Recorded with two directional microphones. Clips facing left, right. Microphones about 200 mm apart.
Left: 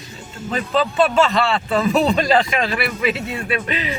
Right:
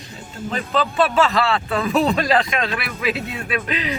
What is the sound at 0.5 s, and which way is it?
A man's voice, centre (ahead or behind).